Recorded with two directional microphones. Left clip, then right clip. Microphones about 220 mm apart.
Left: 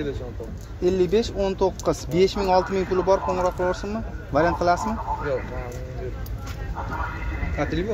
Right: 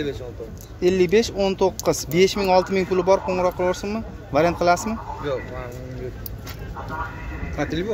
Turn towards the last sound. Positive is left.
turn(degrees=-45)  # may be behind; listen again after turning